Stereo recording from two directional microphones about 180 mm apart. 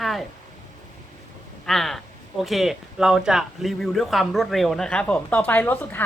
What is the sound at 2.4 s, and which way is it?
Speech, centre (ahead or behind).